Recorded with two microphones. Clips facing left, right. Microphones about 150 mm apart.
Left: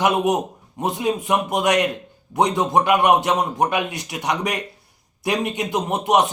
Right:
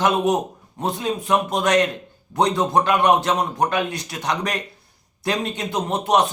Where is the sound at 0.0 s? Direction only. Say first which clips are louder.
Even; 15° left (ahead or behind).